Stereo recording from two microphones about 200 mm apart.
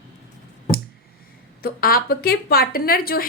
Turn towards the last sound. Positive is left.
turn(degrees=50)  # may be behind; listen again after turning